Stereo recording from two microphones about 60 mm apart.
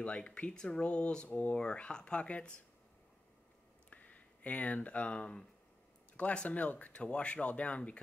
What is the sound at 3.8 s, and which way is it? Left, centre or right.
Speech, left.